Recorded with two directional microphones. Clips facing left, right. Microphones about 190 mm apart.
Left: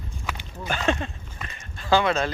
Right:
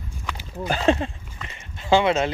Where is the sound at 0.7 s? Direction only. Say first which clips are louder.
Right 5 dB; 30° right (ahead or behind).